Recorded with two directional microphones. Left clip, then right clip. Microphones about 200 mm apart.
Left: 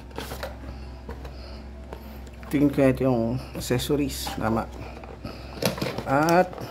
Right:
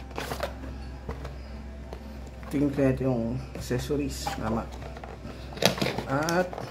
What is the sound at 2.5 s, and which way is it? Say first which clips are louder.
Speech: left 5 dB; 30° left (ahead or behind).